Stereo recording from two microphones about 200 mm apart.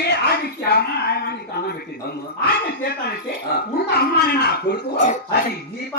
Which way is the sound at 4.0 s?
55° left (ahead or behind).